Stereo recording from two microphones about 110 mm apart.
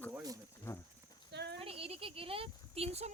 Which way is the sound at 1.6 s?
60° right (ahead or behind).